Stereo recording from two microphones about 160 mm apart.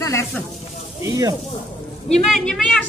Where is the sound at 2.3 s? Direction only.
Centre (ahead or behind).